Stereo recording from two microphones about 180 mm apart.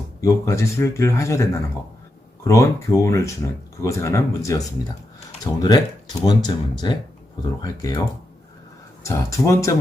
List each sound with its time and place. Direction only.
0.2 s speech: 15° left (ahead or behind)
9.0 s speech: 15° left (ahead or behind)